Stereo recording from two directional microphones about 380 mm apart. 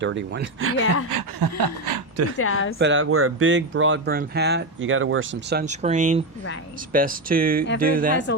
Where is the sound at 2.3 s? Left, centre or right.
Left.